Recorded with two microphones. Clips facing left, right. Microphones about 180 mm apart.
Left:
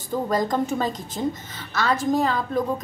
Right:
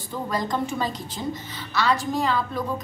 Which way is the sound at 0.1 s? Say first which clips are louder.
Left 4 dB; 45° left (ahead or behind).